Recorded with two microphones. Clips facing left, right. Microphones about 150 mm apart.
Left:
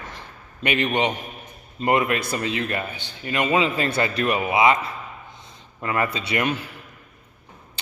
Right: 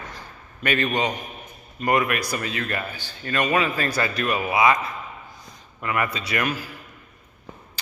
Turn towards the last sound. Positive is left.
turn(degrees=25)  # may be behind; listen again after turning